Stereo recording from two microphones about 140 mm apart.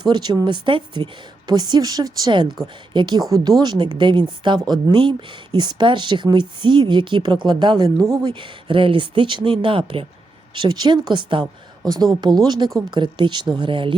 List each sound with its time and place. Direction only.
0.0 s a woman's voice: 30° right (ahead or behind)
12.5 s speech: 30° right (ahead or behind)